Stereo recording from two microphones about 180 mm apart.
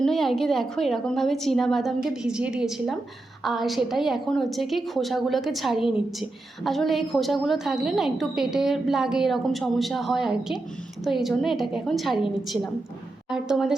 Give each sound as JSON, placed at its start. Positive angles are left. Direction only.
{"t": 0.0, "sound": "a woman's voice", "side_deg": 0}